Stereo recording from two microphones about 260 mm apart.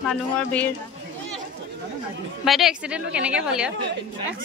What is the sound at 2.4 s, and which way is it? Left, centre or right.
Speech, centre.